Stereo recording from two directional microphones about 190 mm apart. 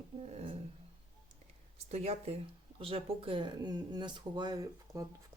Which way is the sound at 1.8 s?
30° right (ahead or behind).